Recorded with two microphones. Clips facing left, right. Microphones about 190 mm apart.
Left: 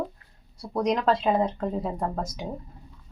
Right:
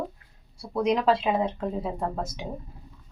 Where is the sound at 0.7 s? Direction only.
5° right (ahead or behind).